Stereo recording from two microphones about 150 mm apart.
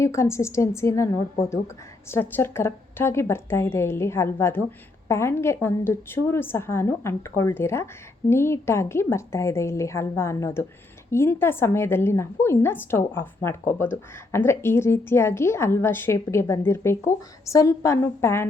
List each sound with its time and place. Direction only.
0.0 s a woman's voice: 20° left (ahead or behind)